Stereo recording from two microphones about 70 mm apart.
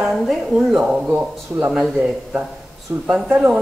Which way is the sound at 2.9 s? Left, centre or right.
Right.